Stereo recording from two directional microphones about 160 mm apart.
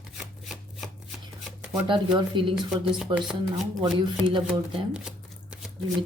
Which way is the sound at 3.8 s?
30° right (ahead or behind).